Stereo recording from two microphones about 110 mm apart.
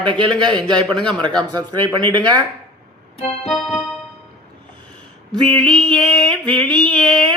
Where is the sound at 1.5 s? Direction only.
45° right (ahead or behind).